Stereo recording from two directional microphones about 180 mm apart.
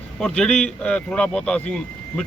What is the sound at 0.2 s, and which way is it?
A man's voice, 5° left (ahead or behind).